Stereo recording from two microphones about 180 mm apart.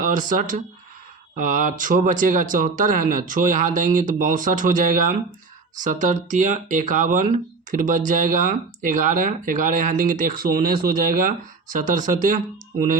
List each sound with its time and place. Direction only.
0.0 s speech: 45° right (ahead or behind)